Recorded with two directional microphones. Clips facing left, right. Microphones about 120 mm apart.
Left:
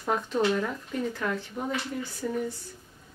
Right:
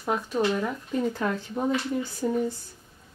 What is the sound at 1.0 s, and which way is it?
Speech, 25° right (ahead or behind).